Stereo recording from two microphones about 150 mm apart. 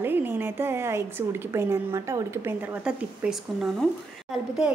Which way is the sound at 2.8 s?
5° right (ahead or behind).